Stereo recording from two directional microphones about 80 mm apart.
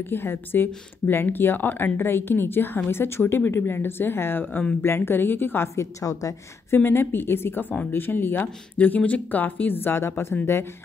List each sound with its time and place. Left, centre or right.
0.0 s speech: left
6.7 s speech: left